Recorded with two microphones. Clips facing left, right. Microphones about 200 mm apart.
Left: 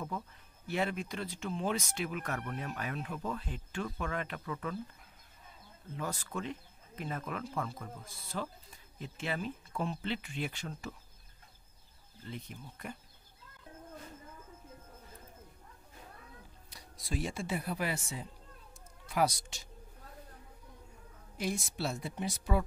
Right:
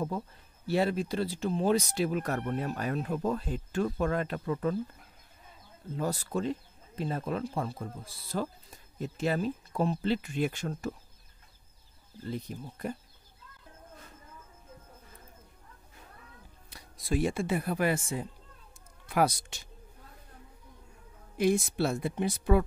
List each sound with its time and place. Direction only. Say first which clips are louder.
0.7 s speech: right 7 dB; 35° right (ahead or behind)
5.9 s speech: right 7 dB; 35° right (ahead or behind)
12.2 s speech: right 8 dB; 40° right (ahead or behind)
16.7 s speech: right 8 dB; 55° right (ahead or behind)
21.4 s speech: right 9 dB; 55° right (ahead or behind)